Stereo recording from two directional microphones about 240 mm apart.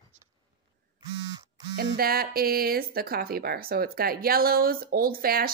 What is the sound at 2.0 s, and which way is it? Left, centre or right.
Speech, right.